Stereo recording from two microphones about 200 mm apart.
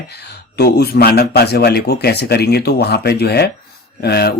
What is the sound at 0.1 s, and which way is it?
Speech, 55° left (ahead or behind).